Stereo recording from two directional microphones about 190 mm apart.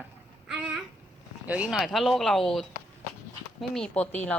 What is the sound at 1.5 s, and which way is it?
Speech, 5° right (ahead or behind).